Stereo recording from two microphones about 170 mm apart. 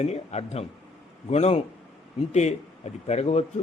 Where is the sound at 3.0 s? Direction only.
40° left (ahead or behind).